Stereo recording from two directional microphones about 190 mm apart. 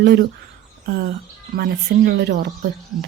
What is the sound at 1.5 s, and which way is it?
Speech, 55° right (ahead or behind).